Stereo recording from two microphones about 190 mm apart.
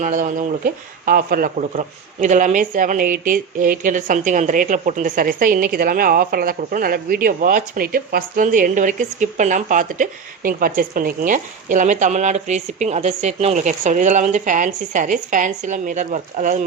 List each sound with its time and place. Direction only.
0.0 s speech: 40° right (ahead or behind)